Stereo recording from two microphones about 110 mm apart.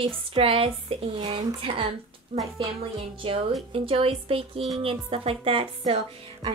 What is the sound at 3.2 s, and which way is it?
A woman's voice, 55° right (ahead or behind).